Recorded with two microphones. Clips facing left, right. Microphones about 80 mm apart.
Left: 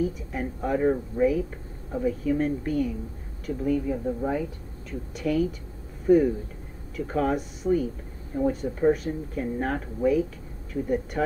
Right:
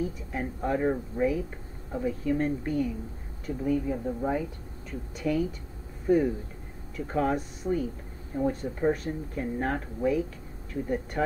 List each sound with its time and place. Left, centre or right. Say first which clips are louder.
0.0 s a woman's voice: left 4 dB; centre
3.9 s a woman's voice: left 2 dB; centre